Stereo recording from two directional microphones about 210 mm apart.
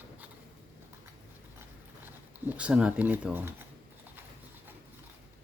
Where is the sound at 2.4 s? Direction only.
5° right (ahead or behind).